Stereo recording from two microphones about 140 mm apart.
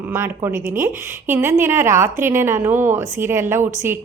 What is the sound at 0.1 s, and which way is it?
A woman's voice, 20° right (ahead or behind).